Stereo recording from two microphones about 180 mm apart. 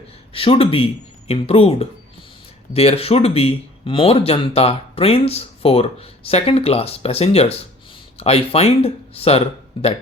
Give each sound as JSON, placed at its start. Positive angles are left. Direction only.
{"t": 0.3, "sound": "speech", "side_deg": 30}